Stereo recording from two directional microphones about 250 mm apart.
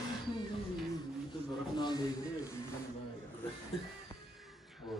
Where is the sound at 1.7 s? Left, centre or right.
Centre.